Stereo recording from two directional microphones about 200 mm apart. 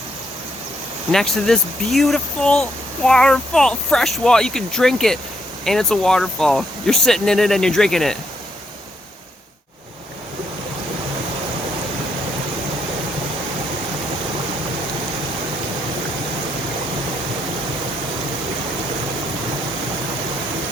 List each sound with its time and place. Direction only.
1.1 s speech: centre (ahead or behind)